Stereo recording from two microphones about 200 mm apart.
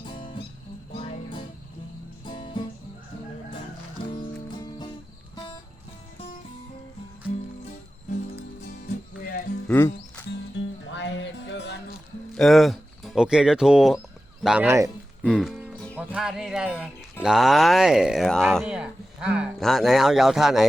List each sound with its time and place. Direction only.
0.9 s music: 25° left (ahead or behind)
4.1 s music: 20° left (ahead or behind)
9.6 s speech: 10° left (ahead or behind)
10.2 s music: 60° left (ahead or behind)
12.3 s speech: centre (ahead or behind)
15.2 s speech: centre (ahead or behind)